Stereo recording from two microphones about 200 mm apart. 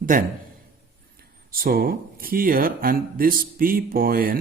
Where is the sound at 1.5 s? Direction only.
45° right (ahead or behind).